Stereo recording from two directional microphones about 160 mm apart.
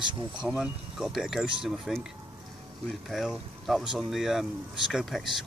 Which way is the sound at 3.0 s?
Centre (ahead or behind).